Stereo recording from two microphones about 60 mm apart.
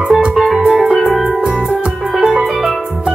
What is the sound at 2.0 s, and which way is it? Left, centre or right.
Music, centre.